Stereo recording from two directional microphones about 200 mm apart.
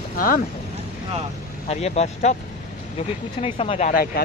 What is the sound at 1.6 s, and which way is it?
Speech, 35° left (ahead or behind).